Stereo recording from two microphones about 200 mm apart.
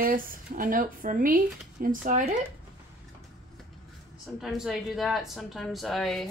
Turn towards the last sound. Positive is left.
turn(degrees=0)  # may be behind; listen again after turning